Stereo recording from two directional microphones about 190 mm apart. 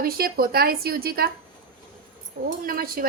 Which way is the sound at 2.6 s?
50° right (ahead or behind).